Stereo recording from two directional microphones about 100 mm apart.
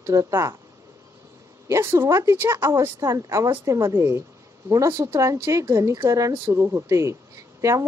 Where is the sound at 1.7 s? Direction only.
30° right (ahead or behind).